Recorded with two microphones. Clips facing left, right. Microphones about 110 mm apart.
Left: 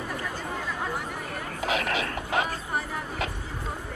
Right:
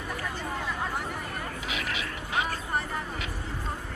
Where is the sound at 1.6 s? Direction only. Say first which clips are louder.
Left 10 dB; 45° left (ahead or behind).